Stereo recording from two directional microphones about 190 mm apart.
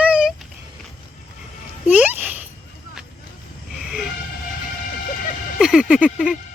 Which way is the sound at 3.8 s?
Centre (ahead or behind).